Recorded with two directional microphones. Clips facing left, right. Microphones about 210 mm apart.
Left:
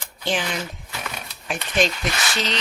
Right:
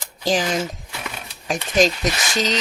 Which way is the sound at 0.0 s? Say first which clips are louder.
Right 5 dB; 40° right (ahead or behind).